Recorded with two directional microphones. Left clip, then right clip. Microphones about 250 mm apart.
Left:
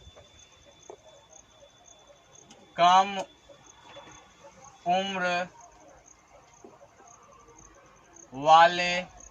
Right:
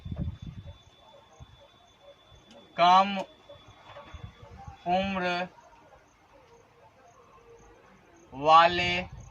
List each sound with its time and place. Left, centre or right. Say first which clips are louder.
2.7 s a man's voice: even; centre
4.9 s a man's voice: left 1 dB; centre
8.4 s a man's voice: left 1 dB; centre